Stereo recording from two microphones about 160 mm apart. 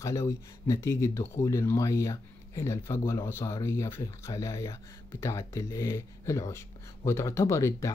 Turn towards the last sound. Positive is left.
turn(degrees=20)  # may be behind; listen again after turning